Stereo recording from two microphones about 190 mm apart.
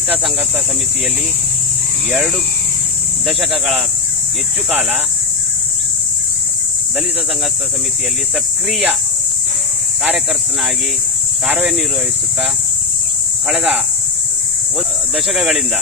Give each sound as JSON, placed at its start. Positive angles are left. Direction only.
{"t": 2.0, "sound": "speech", "side_deg": -5}
{"t": 8.7, "sound": "speech", "side_deg": -5}
{"t": 11.4, "sound": "speech", "side_deg": -5}
{"t": 13.5, "sound": "speech", "side_deg": 0}
{"t": 15.1, "sound": "speech", "side_deg": 0}